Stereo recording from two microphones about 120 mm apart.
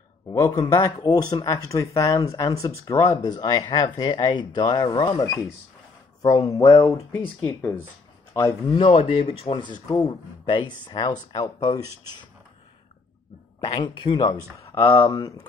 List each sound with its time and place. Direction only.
0.3 s speech: 30° left (ahead or behind)
8.7 s a man's voice: 50° left (ahead or behind); by 12.3 s 35° left (ahead or behind)
13.7 s speech: 40° left (ahead or behind)